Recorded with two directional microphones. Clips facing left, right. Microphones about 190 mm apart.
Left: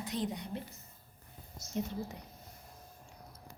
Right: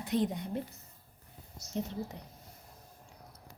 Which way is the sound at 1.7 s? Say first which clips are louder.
Even; 30° right (ahead or behind).